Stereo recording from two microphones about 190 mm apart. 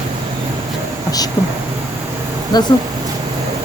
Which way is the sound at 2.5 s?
20° left (ahead or behind).